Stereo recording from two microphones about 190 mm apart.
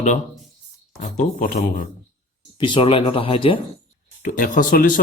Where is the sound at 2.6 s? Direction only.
25° left (ahead or behind).